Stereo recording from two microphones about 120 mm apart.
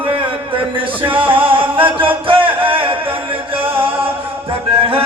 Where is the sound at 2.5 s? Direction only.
45° right (ahead or behind).